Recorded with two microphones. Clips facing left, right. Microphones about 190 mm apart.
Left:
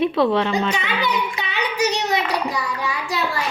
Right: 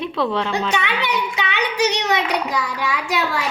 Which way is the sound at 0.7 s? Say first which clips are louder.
Right 1 dB; 75° right (ahead or behind).